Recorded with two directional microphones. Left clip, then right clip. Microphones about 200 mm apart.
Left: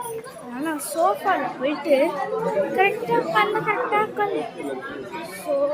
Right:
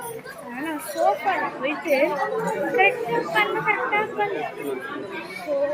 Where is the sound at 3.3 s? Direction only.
20° left (ahead or behind).